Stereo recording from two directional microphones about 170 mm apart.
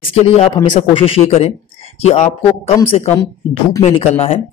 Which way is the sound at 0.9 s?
35° left (ahead or behind).